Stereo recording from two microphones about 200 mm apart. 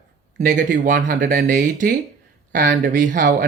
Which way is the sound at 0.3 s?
40° right (ahead or behind).